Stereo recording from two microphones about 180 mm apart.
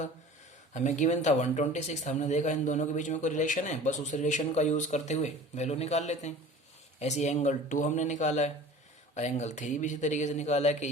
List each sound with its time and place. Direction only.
0.7 s speech: 40° left (ahead or behind)